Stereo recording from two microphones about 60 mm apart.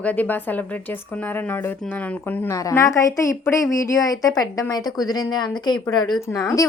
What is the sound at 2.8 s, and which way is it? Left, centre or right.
A woman's voice, left.